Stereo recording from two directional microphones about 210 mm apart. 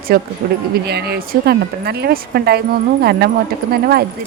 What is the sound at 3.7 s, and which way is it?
Speech, 50° right (ahead or behind).